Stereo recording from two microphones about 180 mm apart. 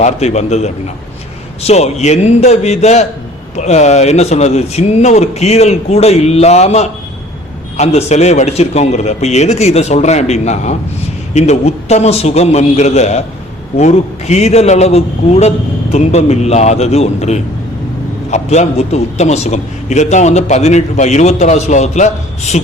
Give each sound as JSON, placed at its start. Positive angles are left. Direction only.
{"t": 0.0, "sound": "a man's voice", "side_deg": 40}